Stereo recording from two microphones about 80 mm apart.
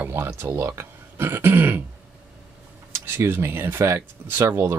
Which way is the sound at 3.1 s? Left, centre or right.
Right.